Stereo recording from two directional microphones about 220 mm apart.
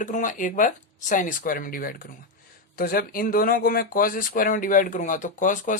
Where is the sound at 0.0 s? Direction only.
35° left (ahead or behind).